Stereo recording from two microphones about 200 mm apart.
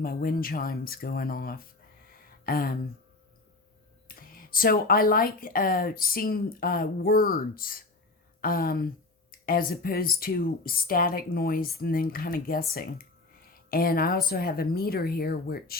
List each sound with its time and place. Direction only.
0.0 s speech: 45° left (ahead or behind)
4.1 s speech: 45° left (ahead or behind)